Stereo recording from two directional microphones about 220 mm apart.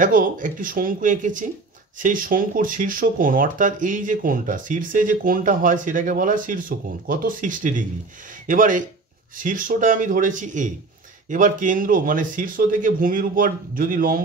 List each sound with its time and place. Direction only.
0.0 s speech: 40° right (ahead or behind)